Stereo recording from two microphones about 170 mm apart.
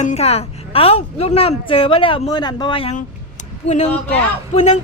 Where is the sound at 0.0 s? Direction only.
40° left (ahead or behind).